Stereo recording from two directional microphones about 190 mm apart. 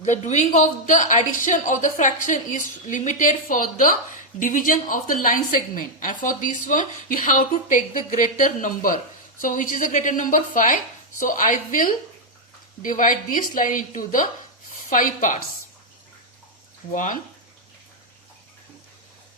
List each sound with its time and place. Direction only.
0.0 s a woman's voice: 40° left (ahead or behind)
16.9 s a woman's voice: 45° left (ahead or behind)